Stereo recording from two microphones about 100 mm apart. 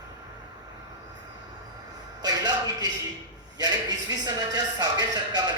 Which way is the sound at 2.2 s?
45° right (ahead or behind).